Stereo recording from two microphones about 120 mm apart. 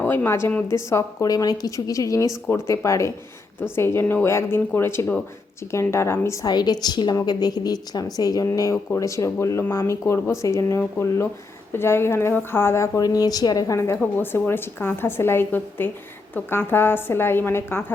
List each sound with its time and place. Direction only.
0.0 s speech: 15° left (ahead or behind)
6.4 s a woman's voice: 35° left (ahead or behind); by 17.9 s 20° left (ahead or behind)